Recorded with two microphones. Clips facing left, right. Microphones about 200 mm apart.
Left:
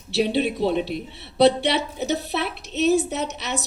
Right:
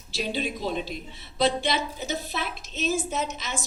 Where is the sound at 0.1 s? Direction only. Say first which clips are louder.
Left 8 dB; 65° left (ahead or behind).